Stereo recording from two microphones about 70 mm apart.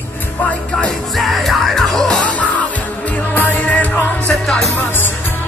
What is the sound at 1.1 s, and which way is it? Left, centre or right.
Music, centre.